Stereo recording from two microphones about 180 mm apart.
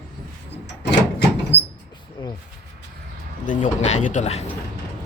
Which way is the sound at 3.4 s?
45° left (ahead or behind).